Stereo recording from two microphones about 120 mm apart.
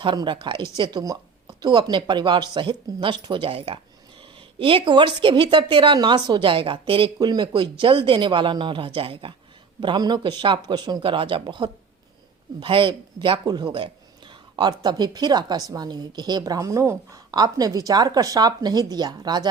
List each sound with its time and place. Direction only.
0.0 s speech: 40° right (ahead or behind)
4.6 s speech: 45° right (ahead or behind)
9.8 s speech: 40° right (ahead or behind)
11.0 s speech: 45° right (ahead or behind)